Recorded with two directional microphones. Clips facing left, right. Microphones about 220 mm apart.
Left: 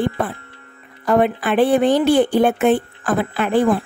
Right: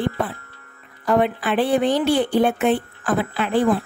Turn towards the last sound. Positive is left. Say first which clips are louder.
# left 2 dB
turn(degrees=50)  # may be behind; listen again after turning